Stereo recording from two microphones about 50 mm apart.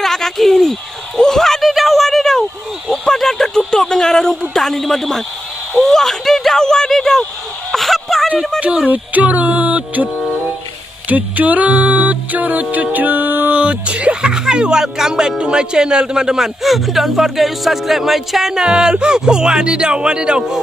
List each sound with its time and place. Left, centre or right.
0.0 s a sound: centre
5.8 s speech: centre
7.7 s a sound: centre
8.5 s music: right
11.1 s music: right
13.6 s speech: right